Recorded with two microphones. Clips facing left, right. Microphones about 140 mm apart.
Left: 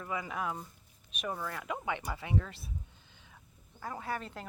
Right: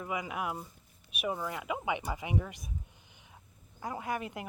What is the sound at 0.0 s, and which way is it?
Speech, 15° right (ahead or behind).